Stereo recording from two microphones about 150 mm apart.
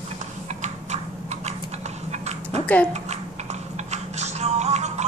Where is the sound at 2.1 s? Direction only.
45° right (ahead or behind).